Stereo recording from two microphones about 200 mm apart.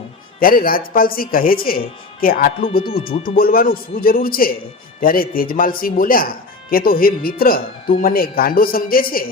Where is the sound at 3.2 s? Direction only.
45° left (ahead or behind).